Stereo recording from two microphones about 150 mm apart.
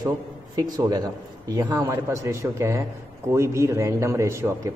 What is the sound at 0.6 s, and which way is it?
A man's voice, 25° right (ahead or behind).